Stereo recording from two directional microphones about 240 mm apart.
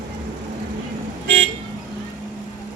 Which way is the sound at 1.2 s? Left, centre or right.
Right.